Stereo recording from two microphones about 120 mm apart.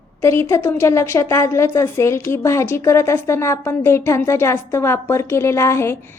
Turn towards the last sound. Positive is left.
turn(degrees=20)  # may be behind; listen again after turning